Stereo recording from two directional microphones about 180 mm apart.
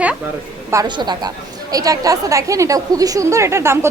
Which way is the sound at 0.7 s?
20° right (ahead or behind).